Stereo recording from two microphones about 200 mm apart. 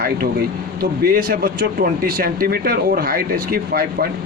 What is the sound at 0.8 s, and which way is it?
Speech, 45° right (ahead or behind).